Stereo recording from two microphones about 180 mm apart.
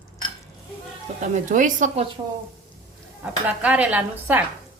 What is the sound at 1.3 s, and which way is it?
Speech, 45° right (ahead or behind).